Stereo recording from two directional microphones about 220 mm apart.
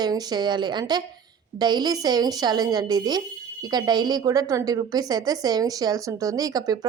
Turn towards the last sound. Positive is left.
turn(degrees=-15)  # may be behind; listen again after turning